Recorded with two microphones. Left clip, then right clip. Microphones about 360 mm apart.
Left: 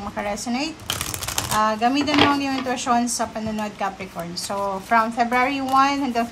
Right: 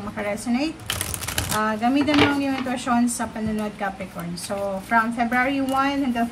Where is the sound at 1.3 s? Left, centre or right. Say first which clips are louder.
Left 3 dB; centre.